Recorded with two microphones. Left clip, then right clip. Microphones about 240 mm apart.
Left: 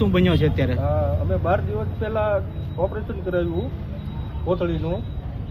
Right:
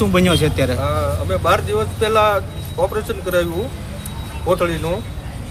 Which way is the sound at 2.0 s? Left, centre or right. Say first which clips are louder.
Right 7 dB; right.